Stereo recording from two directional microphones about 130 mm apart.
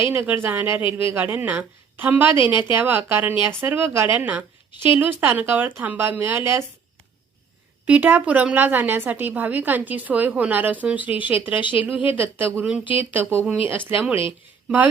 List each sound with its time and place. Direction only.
0.1 s a woman's voice: 15° right (ahead or behind)
0.7 s speech: 40° left (ahead or behind)
1.1 s a woman's voice: 15° right (ahead or behind)
7.9 s a woman's voice: 10° right (ahead or behind)
12.8 s speech: 40° left (ahead or behind)
13.1 s a woman's voice: 10° right (ahead or behind)